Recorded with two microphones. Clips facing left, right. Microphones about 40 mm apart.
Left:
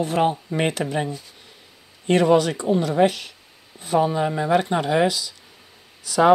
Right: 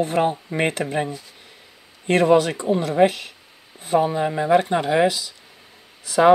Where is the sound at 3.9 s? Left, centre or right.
Centre; by 5.3 s right.